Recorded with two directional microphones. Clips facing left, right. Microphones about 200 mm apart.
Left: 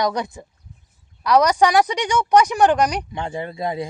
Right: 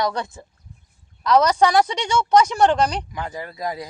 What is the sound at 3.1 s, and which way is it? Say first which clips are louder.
Speech: left 3 dB; 25° left (ahead or behind).